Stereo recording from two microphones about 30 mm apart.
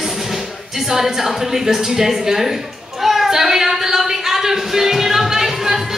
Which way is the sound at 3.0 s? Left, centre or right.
Centre.